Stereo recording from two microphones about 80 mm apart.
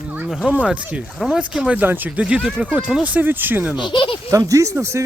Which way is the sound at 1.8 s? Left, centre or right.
Right.